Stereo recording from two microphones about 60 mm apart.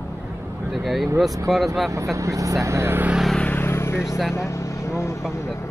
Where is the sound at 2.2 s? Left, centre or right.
Right.